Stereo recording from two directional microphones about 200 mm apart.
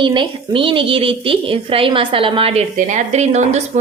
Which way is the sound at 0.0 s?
25° right (ahead or behind).